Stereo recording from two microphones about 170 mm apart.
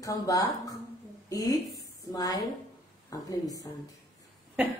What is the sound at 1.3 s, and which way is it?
A woman's voice, 20° left (ahead or behind).